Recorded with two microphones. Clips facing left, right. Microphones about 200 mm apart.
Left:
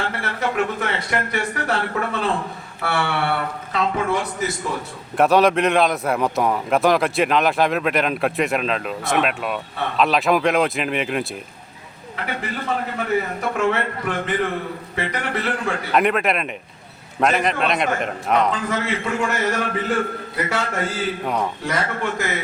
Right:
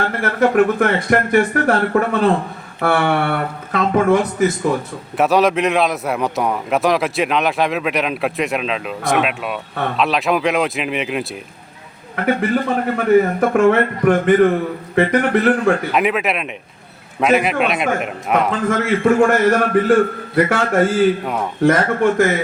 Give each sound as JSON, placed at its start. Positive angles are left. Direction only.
{"t": 0.0, "sound": "a man's voice", "side_deg": -50}
{"t": 5.1, "sound": "a man's voice", "side_deg": 0}
{"t": 12.1, "sound": "a man's voice", "side_deg": -55}
{"t": 15.9, "sound": "a man's voice", "side_deg": 0}
{"t": 18.7, "sound": "a man's voice", "side_deg": -50}